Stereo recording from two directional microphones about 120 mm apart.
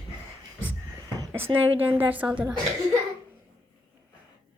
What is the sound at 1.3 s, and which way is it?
A woman's voice, 15° right (ahead or behind).